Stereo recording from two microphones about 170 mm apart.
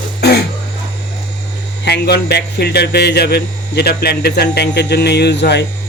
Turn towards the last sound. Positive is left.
turn(degrees=85)